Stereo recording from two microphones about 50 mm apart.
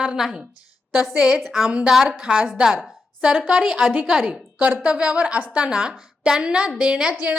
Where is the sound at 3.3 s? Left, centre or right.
Right.